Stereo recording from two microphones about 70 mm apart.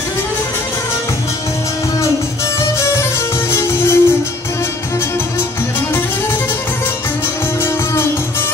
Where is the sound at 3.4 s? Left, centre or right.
Left.